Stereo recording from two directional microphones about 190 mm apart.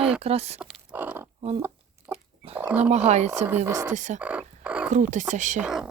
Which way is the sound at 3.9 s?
40° right (ahead or behind).